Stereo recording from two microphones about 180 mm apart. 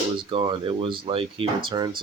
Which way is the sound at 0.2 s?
30° right (ahead or behind).